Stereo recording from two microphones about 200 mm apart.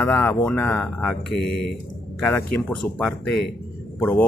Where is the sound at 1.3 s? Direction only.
55° left (ahead or behind).